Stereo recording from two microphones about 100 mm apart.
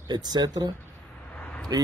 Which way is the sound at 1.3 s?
15° left (ahead or behind).